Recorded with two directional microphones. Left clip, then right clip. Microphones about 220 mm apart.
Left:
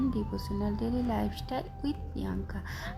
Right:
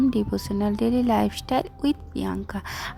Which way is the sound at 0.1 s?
40° right (ahead or behind).